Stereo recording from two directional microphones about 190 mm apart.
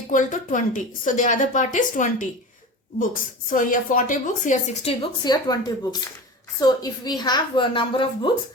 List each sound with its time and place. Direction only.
0.1 s a woman's voice: 45° left (ahead or behind); by 8.3 s 25° left (ahead or behind)